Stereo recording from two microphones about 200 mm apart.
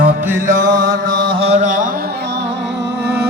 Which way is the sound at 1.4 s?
35° right (ahead or behind).